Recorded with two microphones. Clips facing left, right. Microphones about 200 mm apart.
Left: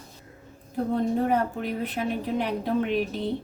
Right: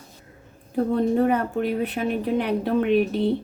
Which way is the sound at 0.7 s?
65° right (ahead or behind).